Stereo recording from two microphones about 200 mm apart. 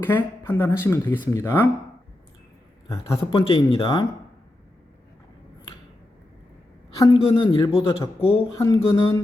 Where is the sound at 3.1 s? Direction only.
30° left (ahead or behind).